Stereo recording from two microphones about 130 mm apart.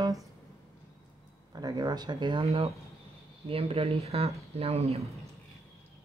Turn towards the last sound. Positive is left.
turn(degrees=-55)  # may be behind; listen again after turning